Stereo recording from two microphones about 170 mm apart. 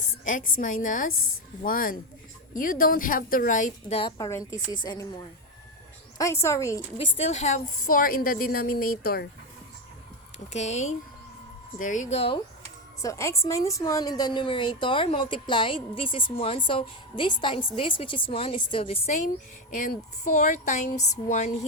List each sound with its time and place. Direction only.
0.3 s a woman's voice: 50° left (ahead or behind)
4.2 s a woman's voice: 20° left (ahead or behind)
6.1 s a woman's voice: 15° left (ahead or behind)
7.1 s a woman's voice: 40° left (ahead or behind); by 9.2 s 60° left (ahead or behind)
10.5 s a woman's voice: 40° left (ahead or behind)
13.0 s a woman's voice: 20° left (ahead or behind); by 21.5 s 45° left (ahead or behind)